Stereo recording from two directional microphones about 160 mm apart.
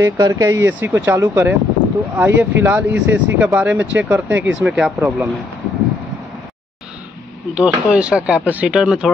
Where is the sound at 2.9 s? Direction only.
90° right.